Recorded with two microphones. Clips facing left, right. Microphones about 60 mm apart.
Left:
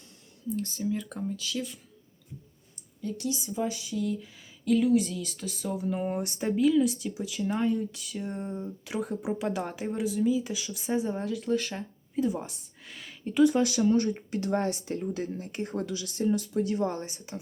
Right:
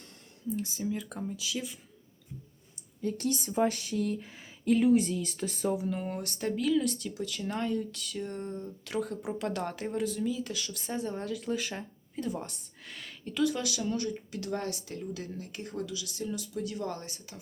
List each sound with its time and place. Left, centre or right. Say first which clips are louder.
0.5 s speech: left 3 dB; centre
3.0 s speech: right 1 dB; right
4.6 s speech: even; right
5.9 s speech: left 5 dB; centre
13.3 s speech: left 7 dB; left